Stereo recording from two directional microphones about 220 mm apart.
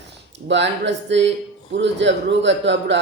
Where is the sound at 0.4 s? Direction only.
50° right (ahead or behind).